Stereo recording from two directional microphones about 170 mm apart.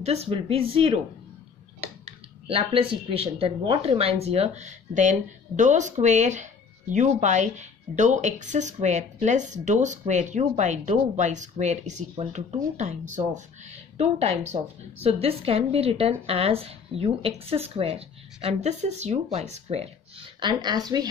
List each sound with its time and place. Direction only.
0.0 s a woman's voice: 35° right (ahead or behind)
2.4 s a woman's voice: 35° right (ahead or behind)